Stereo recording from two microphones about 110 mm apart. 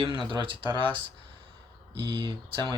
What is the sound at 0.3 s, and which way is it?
Speech, 45° right (ahead or behind).